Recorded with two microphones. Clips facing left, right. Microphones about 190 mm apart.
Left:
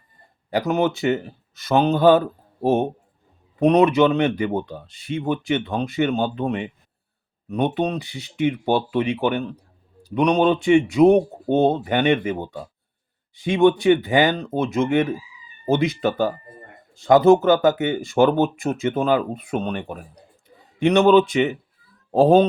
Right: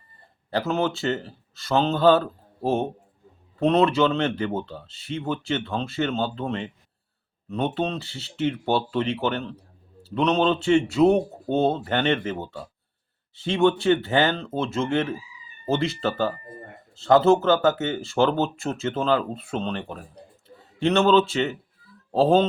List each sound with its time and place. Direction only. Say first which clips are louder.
0.5 s speech: left 4 dB; 15° left (ahead or behind)